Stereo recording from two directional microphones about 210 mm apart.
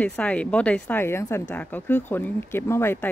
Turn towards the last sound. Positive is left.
turn(degrees=10)  # may be behind; listen again after turning